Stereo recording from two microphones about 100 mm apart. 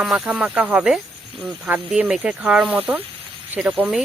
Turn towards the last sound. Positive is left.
turn(degrees=-15)  # may be behind; listen again after turning